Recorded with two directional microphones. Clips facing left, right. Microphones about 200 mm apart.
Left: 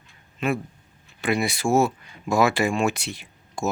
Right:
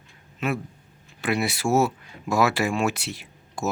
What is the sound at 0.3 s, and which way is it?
Speech, 5° right (ahead or behind).